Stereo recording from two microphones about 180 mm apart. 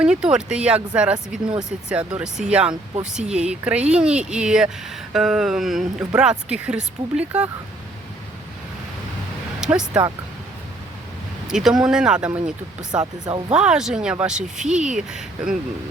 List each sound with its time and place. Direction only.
0.0 s speech: 5° right (ahead or behind)
9.6 s music: 5° right (ahead or behind)
11.4 s speech: 5° right (ahead or behind)
12.9 s speech: 20° right (ahead or behind)
13.5 s speech: 5° right (ahead or behind)